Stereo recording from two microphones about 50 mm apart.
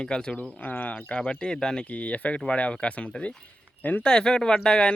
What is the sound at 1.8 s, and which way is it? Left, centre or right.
Speech, left.